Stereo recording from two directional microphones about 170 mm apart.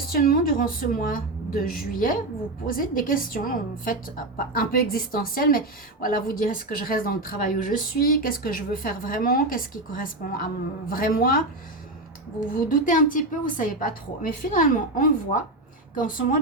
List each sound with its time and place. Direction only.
0.2 s a woman's voice: 55° left (ahead or behind)
12.5 s a woman's voice: 55° left (ahead or behind)